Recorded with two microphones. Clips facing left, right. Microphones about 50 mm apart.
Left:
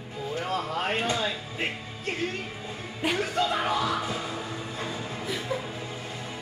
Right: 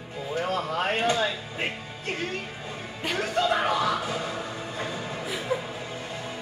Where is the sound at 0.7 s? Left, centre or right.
Centre.